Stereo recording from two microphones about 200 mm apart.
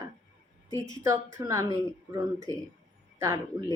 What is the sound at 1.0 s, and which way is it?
Speech, 15° right (ahead or behind).